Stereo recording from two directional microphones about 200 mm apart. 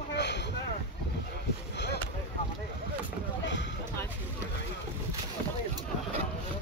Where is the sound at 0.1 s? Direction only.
60° left (ahead or behind).